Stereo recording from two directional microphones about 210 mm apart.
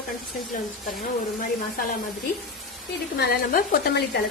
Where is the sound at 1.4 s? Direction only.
40° left (ahead or behind).